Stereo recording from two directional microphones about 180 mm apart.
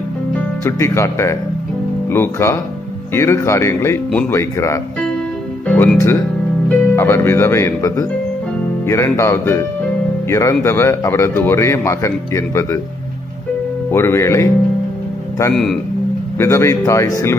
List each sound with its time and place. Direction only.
0.7 s a man's voice: 15° left (ahead or behind)
5.7 s music: 5° left (ahead or behind)
6.7 s a man's voice: 15° left (ahead or behind)
13.9 s a man's voice: 15° left (ahead or behind)
15.5 s speech: centre (ahead or behind)
16.3 s a man's voice: 15° left (ahead or behind)